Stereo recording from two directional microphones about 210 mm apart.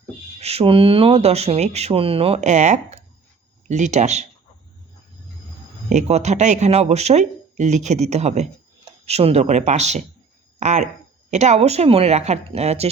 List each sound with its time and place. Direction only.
0.3 s speech: 30° right (ahead or behind)
5.9 s speech: 30° right (ahead or behind)